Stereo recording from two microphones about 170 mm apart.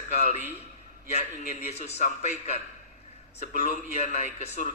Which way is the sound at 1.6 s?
40° left (ahead or behind).